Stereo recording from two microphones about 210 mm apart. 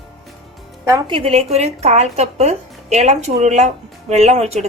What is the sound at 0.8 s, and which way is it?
Speech, 15° right (ahead or behind).